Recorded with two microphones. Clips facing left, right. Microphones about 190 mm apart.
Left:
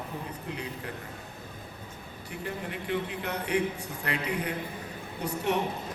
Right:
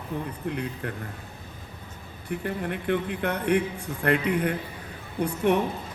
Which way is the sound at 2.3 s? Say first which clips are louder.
Right 7 dB; 55° right (ahead or behind).